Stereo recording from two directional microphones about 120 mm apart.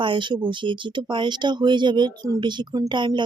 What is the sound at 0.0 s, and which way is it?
Speech, 45° right (ahead or behind).